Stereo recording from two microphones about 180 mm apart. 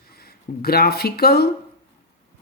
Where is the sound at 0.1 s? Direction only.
60° left (ahead or behind).